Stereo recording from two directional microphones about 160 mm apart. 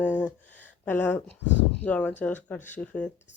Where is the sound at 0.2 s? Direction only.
10° left (ahead or behind).